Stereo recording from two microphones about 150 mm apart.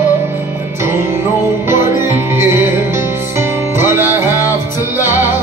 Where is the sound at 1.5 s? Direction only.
20° right (ahead or behind).